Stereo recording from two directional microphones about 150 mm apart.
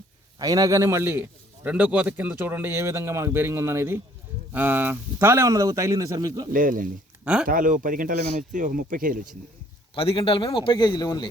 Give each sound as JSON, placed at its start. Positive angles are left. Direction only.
{"t": 0.3, "sound": "a man's voice", "side_deg": -25}
{"t": 6.5, "sound": "speech", "side_deg": -65}
{"t": 9.9, "sound": "a man's voice", "side_deg": 35}